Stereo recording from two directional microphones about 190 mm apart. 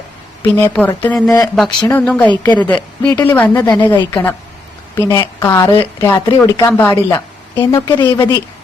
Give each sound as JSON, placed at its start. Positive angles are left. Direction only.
{"t": 0.4, "sound": "a woman's voice", "side_deg": 10}
{"t": 2.4, "sound": "a woman's voice", "side_deg": 25}
{"t": 2.6, "sound": "a woman's voice", "side_deg": 10}